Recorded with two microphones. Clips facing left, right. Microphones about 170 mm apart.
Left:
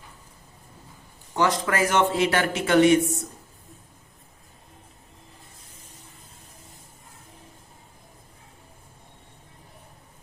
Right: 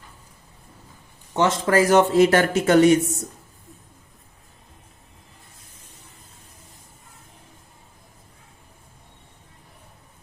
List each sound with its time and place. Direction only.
1.3 s a man's voice: 25° right (ahead or behind); by 3.2 s 40° right (ahead or behind)